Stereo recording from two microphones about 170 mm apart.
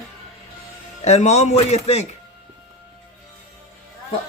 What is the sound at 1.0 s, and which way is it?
Speech, 40° left (ahead or behind).